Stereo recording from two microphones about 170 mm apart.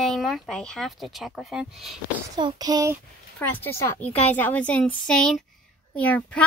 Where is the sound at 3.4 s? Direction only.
10° left (ahead or behind).